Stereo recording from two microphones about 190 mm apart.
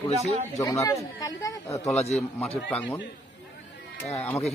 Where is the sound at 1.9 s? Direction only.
35° left (ahead or behind).